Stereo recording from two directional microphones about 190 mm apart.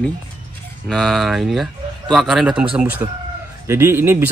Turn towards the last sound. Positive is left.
turn(degrees=-15)  # may be behind; listen again after turning